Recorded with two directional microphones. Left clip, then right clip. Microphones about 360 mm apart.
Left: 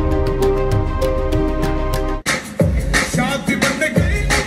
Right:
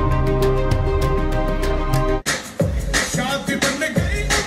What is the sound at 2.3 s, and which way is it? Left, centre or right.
Music, centre.